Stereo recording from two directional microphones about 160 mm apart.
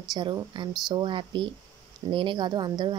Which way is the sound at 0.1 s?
25° right (ahead or behind).